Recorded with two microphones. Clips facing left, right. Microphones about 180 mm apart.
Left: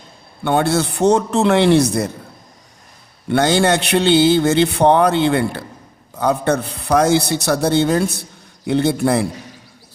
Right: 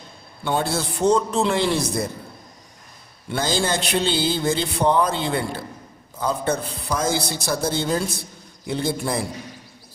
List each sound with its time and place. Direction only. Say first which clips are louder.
0.4 s speech: left 7 dB; 70° left (ahead or behind)
3.2 s speech: left 8 dB; 70° left (ahead or behind)